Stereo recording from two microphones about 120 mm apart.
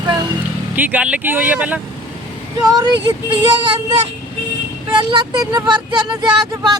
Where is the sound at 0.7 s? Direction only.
15° right (ahead or behind).